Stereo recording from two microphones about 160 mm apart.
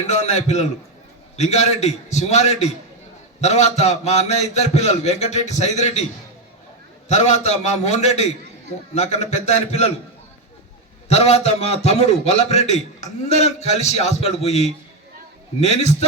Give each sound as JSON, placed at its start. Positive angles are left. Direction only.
{"t": 0.0, "sound": "a man's voice", "side_deg": 45}
{"t": 7.1, "sound": "a man's voice", "side_deg": 45}
{"t": 11.1, "sound": "a man's voice", "side_deg": 40}